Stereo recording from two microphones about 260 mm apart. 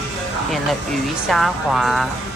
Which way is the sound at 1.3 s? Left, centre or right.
Centre.